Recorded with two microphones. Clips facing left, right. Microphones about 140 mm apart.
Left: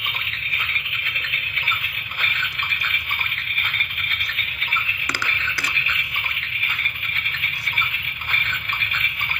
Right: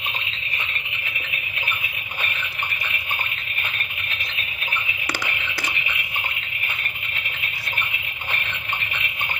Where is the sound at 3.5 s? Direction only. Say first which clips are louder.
Left 1 dB; 25° right (ahead or behind).